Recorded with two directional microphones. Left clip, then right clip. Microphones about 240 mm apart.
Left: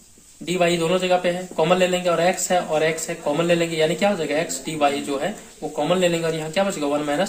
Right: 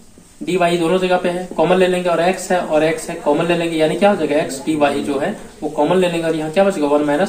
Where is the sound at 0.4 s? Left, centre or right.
Left.